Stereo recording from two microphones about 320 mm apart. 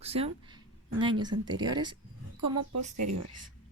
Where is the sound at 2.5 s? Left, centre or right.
Right.